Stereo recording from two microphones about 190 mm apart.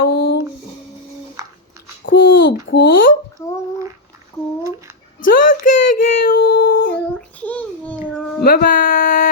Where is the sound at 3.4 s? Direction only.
15° left (ahead or behind).